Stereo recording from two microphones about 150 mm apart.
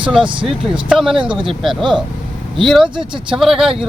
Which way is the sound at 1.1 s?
35° right (ahead or behind).